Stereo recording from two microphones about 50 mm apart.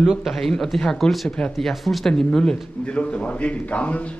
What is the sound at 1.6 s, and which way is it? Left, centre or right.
Speech, centre.